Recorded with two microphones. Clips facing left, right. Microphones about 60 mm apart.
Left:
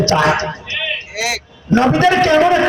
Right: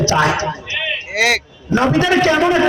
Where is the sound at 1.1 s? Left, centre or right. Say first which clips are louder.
Right 10 dB; right.